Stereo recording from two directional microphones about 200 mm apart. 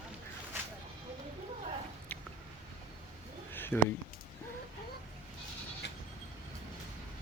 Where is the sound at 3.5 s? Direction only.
10° left (ahead or behind).